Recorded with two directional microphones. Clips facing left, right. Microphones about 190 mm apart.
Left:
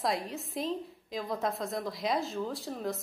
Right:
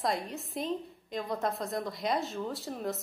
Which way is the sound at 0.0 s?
Centre (ahead or behind).